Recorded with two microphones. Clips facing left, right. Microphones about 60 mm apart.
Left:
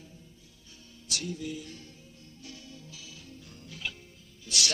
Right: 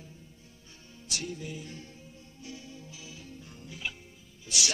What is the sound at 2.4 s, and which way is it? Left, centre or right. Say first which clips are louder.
Music: right 3 dB; right.